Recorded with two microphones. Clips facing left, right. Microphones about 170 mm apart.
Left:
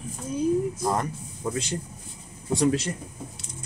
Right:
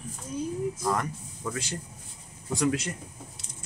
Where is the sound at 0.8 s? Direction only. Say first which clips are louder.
Left 2 dB; 30° left (ahead or behind).